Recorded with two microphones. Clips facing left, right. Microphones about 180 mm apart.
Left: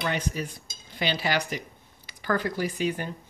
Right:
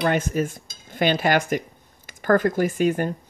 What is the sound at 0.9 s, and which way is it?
Cutlery, 50° right (ahead or behind).